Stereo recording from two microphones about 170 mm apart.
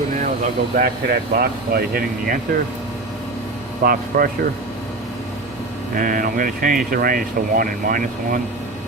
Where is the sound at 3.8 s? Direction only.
60° right (ahead or behind).